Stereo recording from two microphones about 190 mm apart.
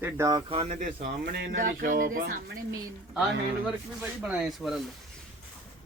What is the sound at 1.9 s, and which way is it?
Speech, 45° right (ahead or behind).